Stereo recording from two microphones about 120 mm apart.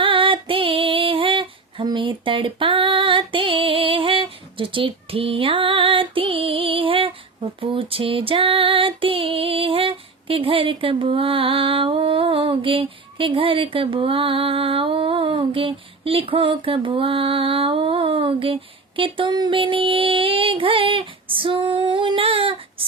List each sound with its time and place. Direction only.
0.0 s female singing: 45° right (ahead or behind)